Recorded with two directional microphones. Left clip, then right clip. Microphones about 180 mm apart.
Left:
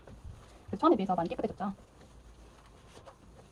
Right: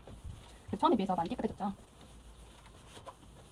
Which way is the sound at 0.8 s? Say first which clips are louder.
Left 3 dB; 45° left (ahead or behind).